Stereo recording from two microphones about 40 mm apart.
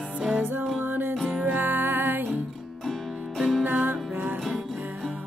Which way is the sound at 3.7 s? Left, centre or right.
Right.